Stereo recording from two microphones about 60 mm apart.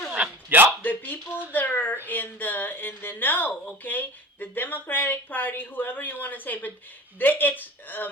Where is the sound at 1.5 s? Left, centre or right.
Left.